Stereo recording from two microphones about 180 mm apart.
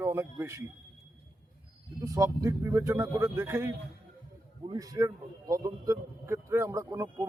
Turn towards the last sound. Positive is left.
turn(degrees=-20)  # may be behind; listen again after turning